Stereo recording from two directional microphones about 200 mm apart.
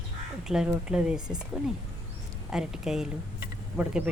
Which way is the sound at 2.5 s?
5° right (ahead or behind).